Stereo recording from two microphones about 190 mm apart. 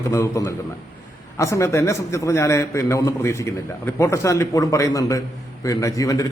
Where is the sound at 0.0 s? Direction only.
15° left (ahead or behind).